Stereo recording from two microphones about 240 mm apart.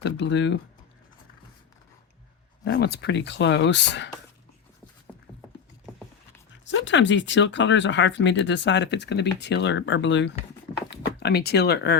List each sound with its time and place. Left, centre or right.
0.0 s speech: left
2.6 s speech: left
6.7 s speech: left